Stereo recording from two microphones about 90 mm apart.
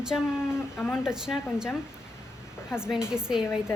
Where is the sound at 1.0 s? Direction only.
5° right (ahead or behind).